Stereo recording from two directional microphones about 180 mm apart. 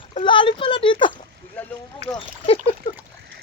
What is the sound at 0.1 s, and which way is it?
Speech, 30° left (ahead or behind).